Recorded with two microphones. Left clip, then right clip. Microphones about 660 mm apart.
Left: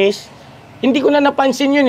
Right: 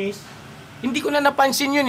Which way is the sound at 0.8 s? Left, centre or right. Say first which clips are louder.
Left 7 dB; centre.